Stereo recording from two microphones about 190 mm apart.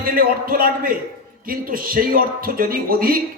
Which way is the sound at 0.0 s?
50° right (ahead or behind).